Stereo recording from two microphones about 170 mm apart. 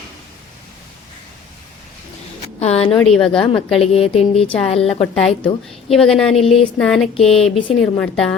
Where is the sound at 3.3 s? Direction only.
30° left (ahead or behind).